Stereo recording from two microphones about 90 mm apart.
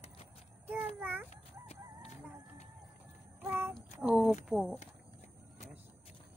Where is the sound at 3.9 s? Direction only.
10° right (ahead or behind).